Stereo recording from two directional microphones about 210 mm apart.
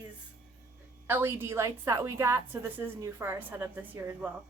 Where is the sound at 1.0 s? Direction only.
10° right (ahead or behind).